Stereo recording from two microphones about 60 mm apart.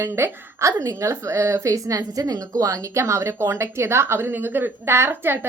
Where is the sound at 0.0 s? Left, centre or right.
Right.